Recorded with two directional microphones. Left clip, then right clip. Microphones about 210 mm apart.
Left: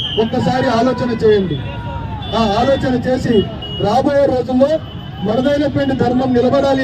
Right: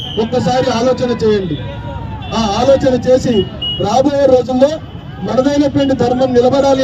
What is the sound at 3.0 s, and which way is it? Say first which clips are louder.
Speech: right 4 dB; 45° right (ahead or behind).